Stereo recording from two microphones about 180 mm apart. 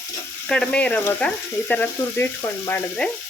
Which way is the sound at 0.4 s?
5° left (ahead or behind).